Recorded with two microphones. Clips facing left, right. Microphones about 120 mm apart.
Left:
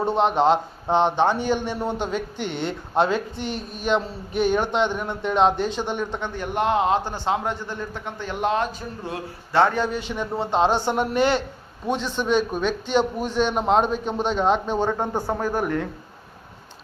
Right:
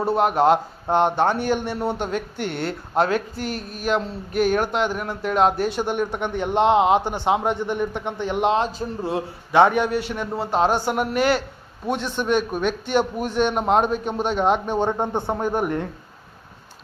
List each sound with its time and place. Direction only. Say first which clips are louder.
0.0 s a man's voice: right 1 dB; 5° right (ahead or behind); by 9.2 s 30° right (ahead or behind)
9.5 s a man's voice: right 3 dB; 15° right (ahead or behind)